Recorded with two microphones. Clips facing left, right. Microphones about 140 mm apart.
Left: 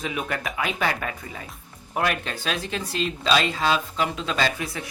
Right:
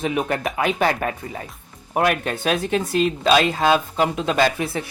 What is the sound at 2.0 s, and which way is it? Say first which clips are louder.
Speech: right 5 dB; 50° right (ahead or behind).